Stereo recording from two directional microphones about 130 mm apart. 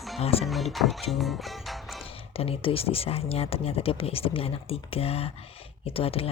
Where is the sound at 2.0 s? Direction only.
50° left (ahead or behind).